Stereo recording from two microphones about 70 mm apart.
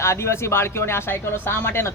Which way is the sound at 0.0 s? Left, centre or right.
Left.